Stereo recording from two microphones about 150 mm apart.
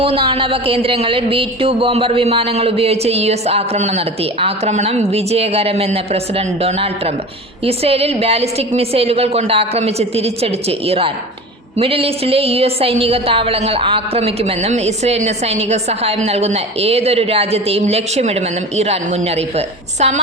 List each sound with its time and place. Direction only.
0.0 s a woman's voice: 35° right (ahead or behind)